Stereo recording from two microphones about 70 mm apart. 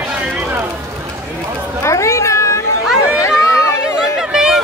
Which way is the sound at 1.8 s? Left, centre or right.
Left.